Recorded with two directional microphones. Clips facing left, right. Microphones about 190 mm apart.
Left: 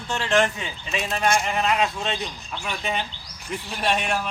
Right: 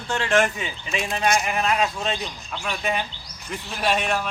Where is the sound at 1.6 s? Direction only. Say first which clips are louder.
Even; centre (ahead or behind).